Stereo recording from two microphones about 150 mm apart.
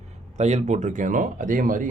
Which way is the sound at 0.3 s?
50° right (ahead or behind).